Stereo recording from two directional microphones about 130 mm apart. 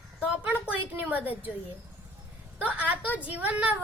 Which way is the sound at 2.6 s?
10° right (ahead or behind).